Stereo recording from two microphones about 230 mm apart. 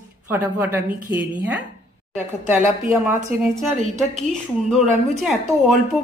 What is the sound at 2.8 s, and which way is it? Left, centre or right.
Speech, centre.